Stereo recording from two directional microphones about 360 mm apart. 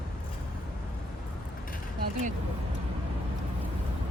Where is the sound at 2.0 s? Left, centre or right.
Right.